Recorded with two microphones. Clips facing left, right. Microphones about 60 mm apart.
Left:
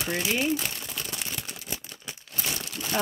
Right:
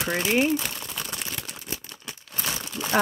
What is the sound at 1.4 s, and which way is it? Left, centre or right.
Crumpling, centre.